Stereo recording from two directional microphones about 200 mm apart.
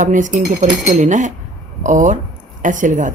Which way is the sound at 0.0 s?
40° right (ahead or behind).